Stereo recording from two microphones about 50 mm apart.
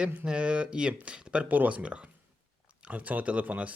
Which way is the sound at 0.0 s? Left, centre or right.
Right.